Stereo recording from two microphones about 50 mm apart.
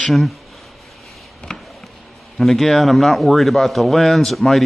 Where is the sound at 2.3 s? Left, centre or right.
Centre.